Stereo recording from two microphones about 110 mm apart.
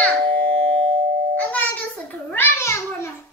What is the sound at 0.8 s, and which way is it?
Doorbell, 90° right.